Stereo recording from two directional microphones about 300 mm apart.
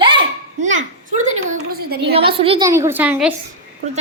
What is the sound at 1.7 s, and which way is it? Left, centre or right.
Speech, right.